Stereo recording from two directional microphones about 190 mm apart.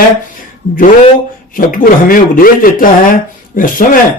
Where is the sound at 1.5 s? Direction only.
45° left (ahead or behind).